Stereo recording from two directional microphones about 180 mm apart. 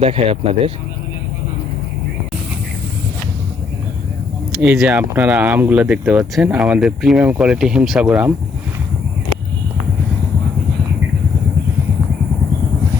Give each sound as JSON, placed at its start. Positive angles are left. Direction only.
{"t": 0.0, "sound": "speech", "side_deg": -35}
{"t": 4.8, "sound": "speech", "side_deg": -10}